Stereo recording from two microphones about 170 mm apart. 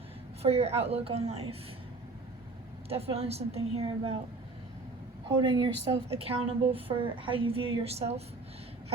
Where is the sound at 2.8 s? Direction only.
35° right (ahead or behind).